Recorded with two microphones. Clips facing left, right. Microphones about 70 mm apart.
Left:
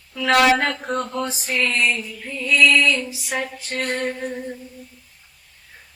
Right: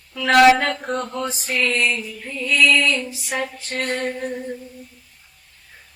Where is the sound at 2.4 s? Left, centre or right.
Centre.